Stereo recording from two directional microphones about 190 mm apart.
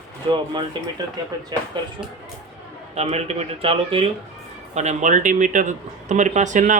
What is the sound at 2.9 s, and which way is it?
Speech, 35° right (ahead or behind).